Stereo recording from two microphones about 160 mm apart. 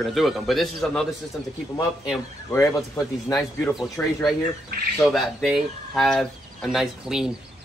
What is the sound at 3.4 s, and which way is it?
Speech, 5° left (ahead or behind).